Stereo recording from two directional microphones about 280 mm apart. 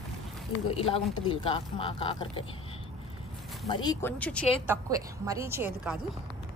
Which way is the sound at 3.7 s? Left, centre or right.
Centre.